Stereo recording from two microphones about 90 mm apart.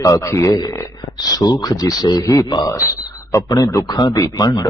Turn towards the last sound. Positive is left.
turn(degrees=45)  # may be behind; listen again after turning